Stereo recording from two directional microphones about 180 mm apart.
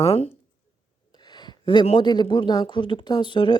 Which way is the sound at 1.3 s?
25° left (ahead or behind).